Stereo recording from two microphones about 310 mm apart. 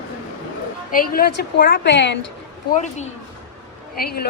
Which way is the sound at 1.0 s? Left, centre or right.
Left.